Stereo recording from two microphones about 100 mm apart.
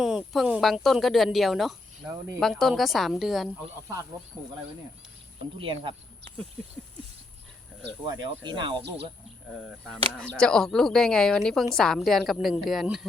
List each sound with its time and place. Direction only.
0.0 s speech: 5° right (ahead or behind)
2.0 s speech: 30° right (ahead or behind)
2.4 s speech: centre (ahead or behind)
5.5 s speech: 60° right (ahead or behind)
8.0 s speech: 55° right (ahead or behind)
10.2 s speech: 5° left (ahead or behind)